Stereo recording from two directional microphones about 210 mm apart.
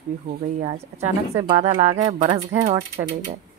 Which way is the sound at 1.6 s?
35° right (ahead or behind).